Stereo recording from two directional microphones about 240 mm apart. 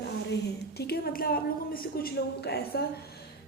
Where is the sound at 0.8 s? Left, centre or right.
Left.